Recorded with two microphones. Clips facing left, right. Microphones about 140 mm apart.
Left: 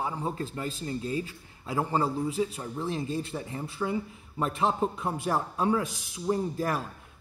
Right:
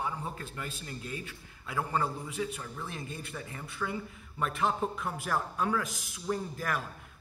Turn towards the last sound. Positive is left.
turn(degrees=30)  # may be behind; listen again after turning